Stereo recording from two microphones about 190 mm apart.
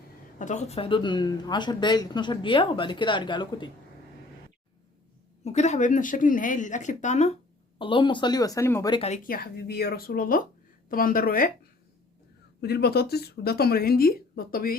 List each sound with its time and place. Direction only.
0.3 s speech: 40° left (ahead or behind); by 3.7 s 25° left (ahead or behind)
5.4 s speech: 35° left (ahead or behind)
7.8 s speech: 25° left (ahead or behind)
8.9 s speech: 35° left (ahead or behind); by 11.5 s 50° left (ahead or behind)
12.6 s a woman's voice: 55° left (ahead or behind)